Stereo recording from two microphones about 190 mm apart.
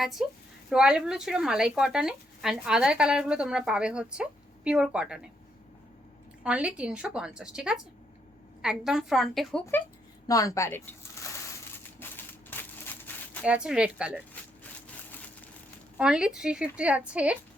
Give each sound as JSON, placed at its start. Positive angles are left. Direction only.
{"t": 0.0, "sound": "speech", "side_deg": 0}
{"t": 6.4, "sound": "speech", "side_deg": -5}
{"t": 10.2, "sound": "speech", "side_deg": 20}
{"t": 11.9, "sound": "crushing", "side_deg": 10}
{"t": 13.4, "sound": "speech", "side_deg": -5}
{"t": 14.4, "sound": "a sound", "side_deg": 5}
{"t": 16.0, "sound": "speech", "side_deg": -5}